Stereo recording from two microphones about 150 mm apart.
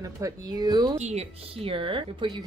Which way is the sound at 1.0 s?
45° right (ahead or behind).